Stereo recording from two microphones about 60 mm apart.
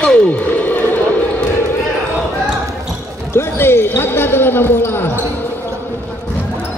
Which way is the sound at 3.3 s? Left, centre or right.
Left.